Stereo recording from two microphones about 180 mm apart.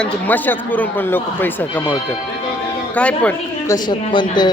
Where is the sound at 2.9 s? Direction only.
5° left (ahead or behind).